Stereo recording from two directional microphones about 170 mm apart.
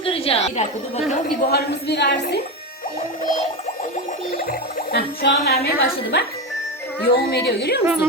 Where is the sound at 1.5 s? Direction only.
75° left (ahead or behind).